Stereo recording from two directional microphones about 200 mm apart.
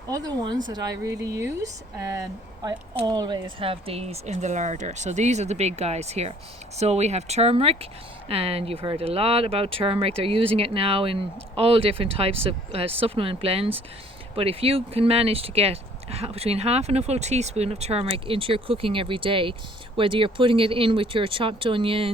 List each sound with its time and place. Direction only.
0.1 s speech: 20° right (ahead or behind)